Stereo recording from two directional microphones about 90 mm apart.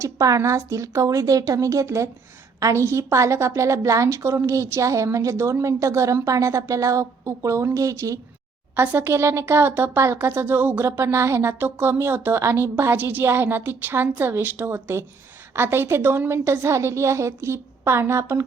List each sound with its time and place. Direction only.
0.0 s speech: 35° right (ahead or behind)
8.7 s speech: 20° right (ahead or behind)